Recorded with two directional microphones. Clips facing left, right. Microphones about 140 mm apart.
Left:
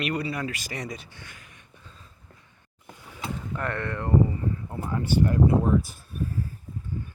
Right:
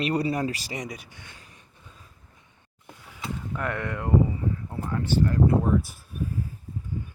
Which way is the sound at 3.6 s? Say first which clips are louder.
Even; 10° right (ahead or behind).